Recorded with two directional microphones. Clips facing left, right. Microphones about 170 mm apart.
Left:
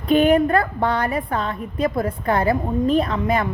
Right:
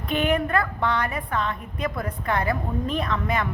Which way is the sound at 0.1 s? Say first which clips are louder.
Left 8 dB; 35° left (ahead or behind).